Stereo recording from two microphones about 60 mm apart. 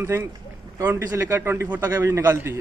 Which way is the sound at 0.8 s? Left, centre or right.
Right.